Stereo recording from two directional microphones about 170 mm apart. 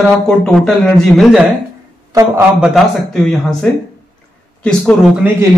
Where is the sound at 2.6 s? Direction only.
Centre (ahead or behind).